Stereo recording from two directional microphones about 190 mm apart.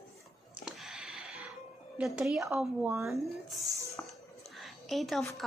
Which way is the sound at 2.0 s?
5° right (ahead or behind).